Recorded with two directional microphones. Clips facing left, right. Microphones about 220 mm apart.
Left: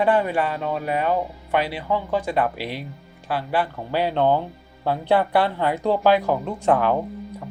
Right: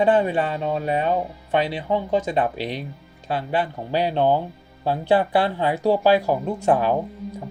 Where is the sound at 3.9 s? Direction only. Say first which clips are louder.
Even; 15° right (ahead or behind).